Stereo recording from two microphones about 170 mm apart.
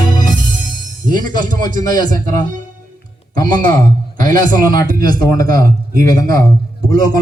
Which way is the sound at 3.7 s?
55° right (ahead or behind).